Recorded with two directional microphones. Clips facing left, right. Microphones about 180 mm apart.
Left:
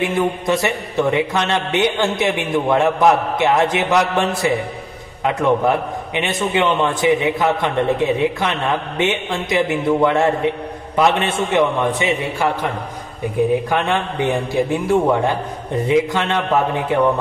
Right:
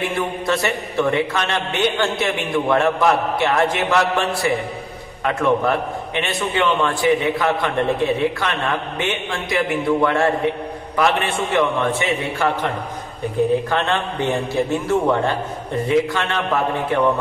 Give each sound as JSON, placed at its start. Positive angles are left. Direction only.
{"t": 0.0, "sound": "a man's voice", "side_deg": 20}
{"t": 13.7, "sound": "a man's voice", "side_deg": 15}